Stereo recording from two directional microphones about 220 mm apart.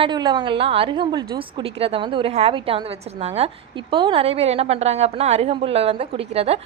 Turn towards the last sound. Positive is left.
turn(degrees=-25)  # may be behind; listen again after turning